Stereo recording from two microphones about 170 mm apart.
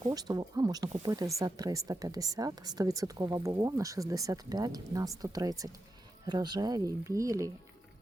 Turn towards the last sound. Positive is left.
turn(degrees=-20)  # may be behind; listen again after turning